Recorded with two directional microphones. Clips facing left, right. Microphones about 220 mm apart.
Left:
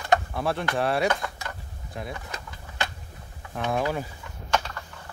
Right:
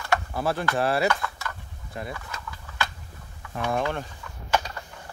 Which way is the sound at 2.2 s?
25° left (ahead or behind).